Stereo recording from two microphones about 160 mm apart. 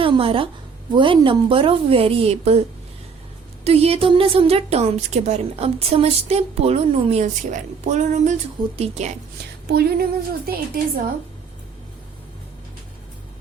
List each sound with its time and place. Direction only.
0.0 s a woman's voice: 35° right (ahead or behind)
3.6 s a woman's voice: 40° right (ahead or behind)
9.6 s a woman's voice: 75° right (ahead or behind)